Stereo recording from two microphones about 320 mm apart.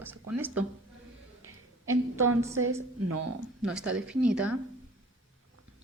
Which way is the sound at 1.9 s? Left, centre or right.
Right.